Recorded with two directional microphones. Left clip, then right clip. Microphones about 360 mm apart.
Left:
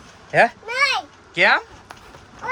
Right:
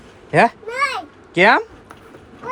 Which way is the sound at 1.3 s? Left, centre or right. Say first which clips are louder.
Right 3 dB; centre.